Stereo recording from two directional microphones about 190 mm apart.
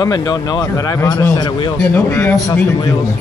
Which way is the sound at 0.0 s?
25° left (ahead or behind).